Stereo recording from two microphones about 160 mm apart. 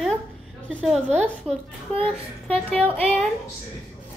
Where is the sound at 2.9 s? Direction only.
5° left (ahead or behind).